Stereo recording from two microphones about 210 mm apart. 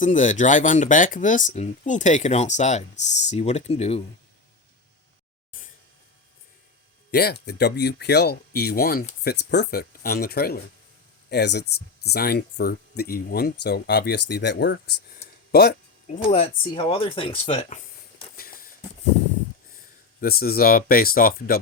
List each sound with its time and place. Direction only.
0.0 s speech: 35° left (ahead or behind)
7.1 s speech: 50° left (ahead or behind)
16.3 s speech: 25° left (ahead or behind)
18.3 s a sound: 45° left (ahead or behind)
20.2 s speech: 45° left (ahead or behind)